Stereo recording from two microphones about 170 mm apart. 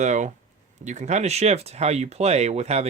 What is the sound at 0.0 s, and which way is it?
Speech, 45° right (ahead or behind).